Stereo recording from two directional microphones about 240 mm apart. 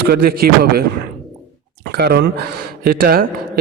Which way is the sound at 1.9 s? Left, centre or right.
Right.